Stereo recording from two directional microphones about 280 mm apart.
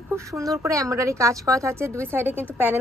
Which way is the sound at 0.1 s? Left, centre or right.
Centre.